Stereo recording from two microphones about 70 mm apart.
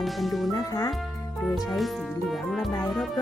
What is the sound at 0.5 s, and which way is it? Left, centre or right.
Music, left.